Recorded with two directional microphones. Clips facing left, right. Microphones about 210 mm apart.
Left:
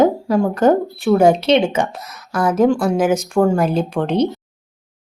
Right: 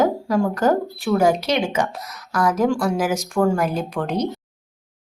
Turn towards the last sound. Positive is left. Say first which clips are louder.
# left 6 dB
turn(degrees=25)  # may be behind; listen again after turning